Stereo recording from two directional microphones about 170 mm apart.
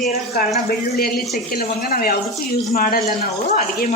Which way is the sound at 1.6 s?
60° left (ahead or behind).